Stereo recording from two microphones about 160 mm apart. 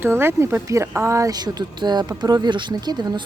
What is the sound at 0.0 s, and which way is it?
Speech, 15° right (ahead or behind).